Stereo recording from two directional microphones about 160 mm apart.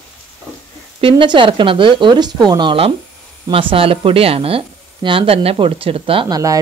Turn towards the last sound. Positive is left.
turn(degrees=-25)  # may be behind; listen again after turning